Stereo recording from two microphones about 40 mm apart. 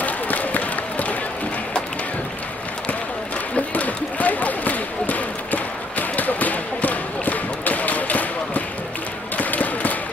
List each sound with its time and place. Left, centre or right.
0.0 s applause: left
3.7 s basketball bounce: left
9.4 s a sound: left